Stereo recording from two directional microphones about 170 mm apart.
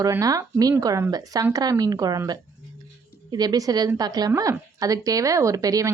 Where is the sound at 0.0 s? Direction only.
20° right (ahead or behind).